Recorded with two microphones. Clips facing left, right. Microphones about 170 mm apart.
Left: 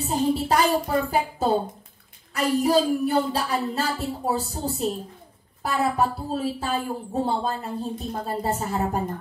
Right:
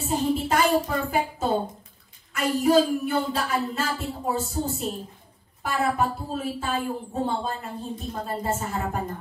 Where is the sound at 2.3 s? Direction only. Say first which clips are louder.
Even; 35° left (ahead or behind).